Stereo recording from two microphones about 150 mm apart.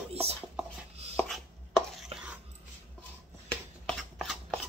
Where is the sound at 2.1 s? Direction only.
40° right (ahead or behind).